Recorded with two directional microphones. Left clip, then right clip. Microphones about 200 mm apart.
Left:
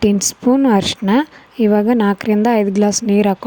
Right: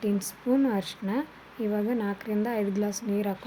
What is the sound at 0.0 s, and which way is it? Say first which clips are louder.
Speech: left 15 dB; 45° left (ahead or behind).